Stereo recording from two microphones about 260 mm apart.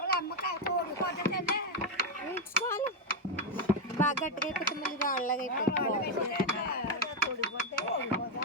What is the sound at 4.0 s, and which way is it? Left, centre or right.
Boat, left.